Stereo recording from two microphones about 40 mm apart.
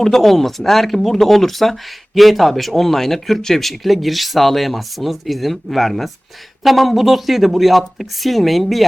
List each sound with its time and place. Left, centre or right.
0.0 s speech: centre